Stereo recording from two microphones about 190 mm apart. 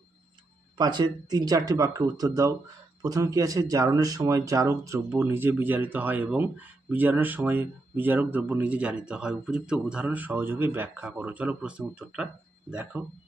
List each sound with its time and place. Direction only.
0.7 s speech: 20° right (ahead or behind); by 13.0 s 5° right (ahead or behind)